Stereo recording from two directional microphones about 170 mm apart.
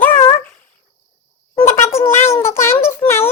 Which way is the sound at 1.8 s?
15° left (ahead or behind).